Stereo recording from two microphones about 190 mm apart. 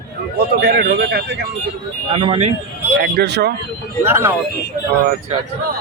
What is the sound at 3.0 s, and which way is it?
Speech, 60° right (ahead or behind).